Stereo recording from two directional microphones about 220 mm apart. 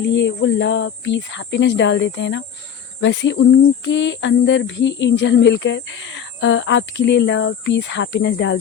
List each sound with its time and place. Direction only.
0.1 s speech: 55° left (ahead or behind)